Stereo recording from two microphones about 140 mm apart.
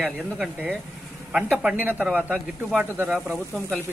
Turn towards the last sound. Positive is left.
turn(degrees=0)  # may be behind; listen again after turning